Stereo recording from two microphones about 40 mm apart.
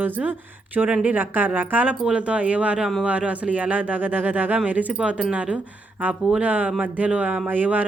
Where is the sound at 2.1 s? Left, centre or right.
Right.